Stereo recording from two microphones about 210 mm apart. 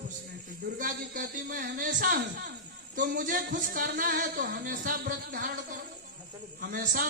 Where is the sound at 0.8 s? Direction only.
40° right (ahead or behind).